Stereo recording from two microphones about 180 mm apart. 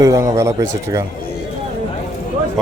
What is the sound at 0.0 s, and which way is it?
Speech, 15° right (ahead or behind).